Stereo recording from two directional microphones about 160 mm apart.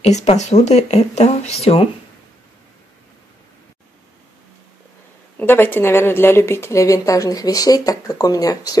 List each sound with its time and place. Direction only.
0.0 s speech: 45° left (ahead or behind)
5.4 s a woman's voice: 10° left (ahead or behind)